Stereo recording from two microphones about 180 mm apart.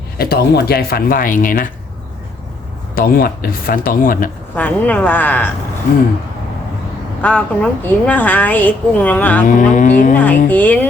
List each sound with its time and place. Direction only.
0.2 s speech: 60° left (ahead or behind)
2.9 s speech: 55° left (ahead or behind)
4.5 s a woman's voice: 10° left (ahead or behind)
7.2 s a woman's voice: 5° left (ahead or behind)
9.5 s speech: 45° left (ahead or behind)
10.2 s a woman's voice: 10° left (ahead or behind)